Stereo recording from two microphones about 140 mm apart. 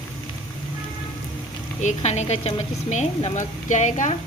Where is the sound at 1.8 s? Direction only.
50° left (ahead or behind).